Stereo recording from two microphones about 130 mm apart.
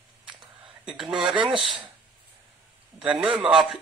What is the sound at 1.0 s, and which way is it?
Speech, 40° right (ahead or behind).